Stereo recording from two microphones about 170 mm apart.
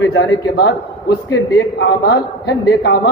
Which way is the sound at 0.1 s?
90° left.